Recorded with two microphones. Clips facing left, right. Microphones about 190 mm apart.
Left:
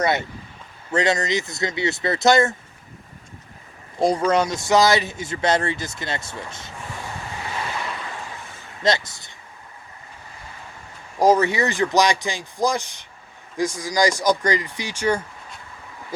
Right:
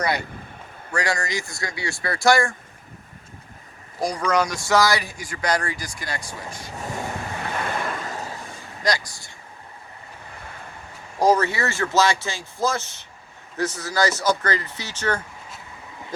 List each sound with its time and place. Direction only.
0.0 s speech: 20° left (ahead or behind)
4.0 s speech: 25° left (ahead or behind)
7.7 s waves: 50° right (ahead or behind)
8.8 s speech: 25° left (ahead or behind)
11.2 s speech: 15° left (ahead or behind)